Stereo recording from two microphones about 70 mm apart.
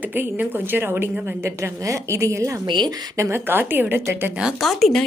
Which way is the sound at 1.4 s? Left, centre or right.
Right.